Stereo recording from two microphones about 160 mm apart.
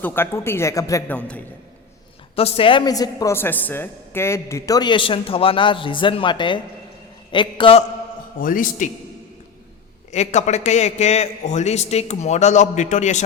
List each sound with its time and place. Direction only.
0.0 s a man's voice: 15° left (ahead or behind)
2.3 s a woman's voice: 35° left (ahead or behind)
8.4 s a man's voice: 60° left (ahead or behind)
10.1 s a man's voice: 45° left (ahead or behind)